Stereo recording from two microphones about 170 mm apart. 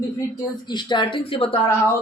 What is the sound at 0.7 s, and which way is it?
Speech, 25° left (ahead or behind).